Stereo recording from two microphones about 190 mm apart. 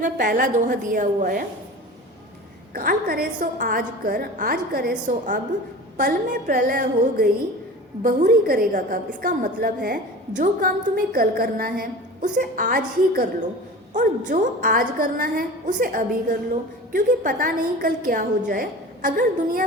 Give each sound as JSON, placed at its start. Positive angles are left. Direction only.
{"t": 0.0, "sound": "a woman's voice", "side_deg": -45}
{"t": 2.7, "sound": "a woman's voice", "side_deg": -50}